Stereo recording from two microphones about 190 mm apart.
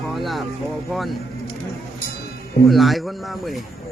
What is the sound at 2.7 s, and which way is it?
Speech, centre (ahead or behind).